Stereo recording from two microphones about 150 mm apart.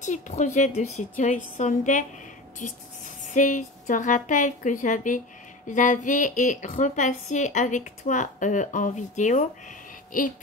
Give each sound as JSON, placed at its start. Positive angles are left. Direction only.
{"t": 0.0, "sound": "speech", "side_deg": 55}